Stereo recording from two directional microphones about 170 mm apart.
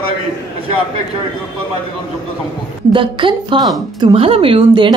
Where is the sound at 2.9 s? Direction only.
30° right (ahead or behind).